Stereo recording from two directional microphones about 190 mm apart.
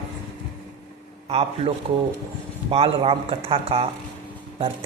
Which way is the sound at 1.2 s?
30° right (ahead or behind).